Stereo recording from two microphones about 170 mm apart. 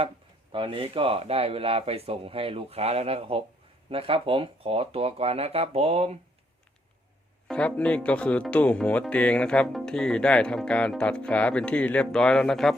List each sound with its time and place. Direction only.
0.5 s speech: 30° right (ahead or behind)
7.4 s speech: 5° left (ahead or behind)